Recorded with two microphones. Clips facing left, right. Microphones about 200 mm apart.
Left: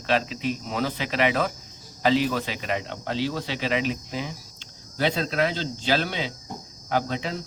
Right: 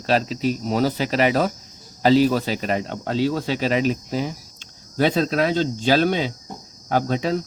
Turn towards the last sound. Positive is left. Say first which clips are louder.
# right 6 dB
turn(degrees=-45)  # may be behind; listen again after turning